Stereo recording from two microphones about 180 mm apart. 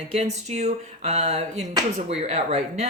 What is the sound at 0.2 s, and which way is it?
Speech, 35° right (ahead or behind).